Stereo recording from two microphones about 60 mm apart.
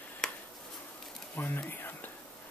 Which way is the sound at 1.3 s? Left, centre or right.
Left.